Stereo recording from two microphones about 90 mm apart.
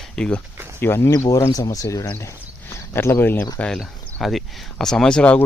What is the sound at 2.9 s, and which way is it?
Speech, 25° left (ahead or behind).